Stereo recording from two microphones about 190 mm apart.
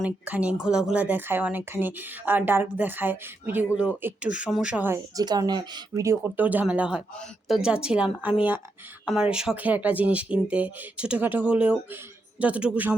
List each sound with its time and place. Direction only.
0.0 s a woman's voice: 10° right (ahead or behind)